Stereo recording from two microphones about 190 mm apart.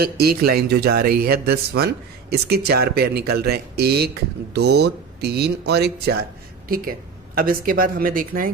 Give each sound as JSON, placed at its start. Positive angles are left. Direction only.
{"t": 0.0, "sound": "speech", "side_deg": -55}
{"t": 7.3, "sound": "a woman's voice", "side_deg": -50}